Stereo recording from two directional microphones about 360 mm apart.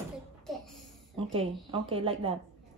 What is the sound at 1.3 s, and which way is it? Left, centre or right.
Speech, centre.